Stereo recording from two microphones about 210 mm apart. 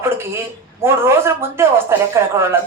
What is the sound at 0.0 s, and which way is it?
Speech, 10° right (ahead or behind).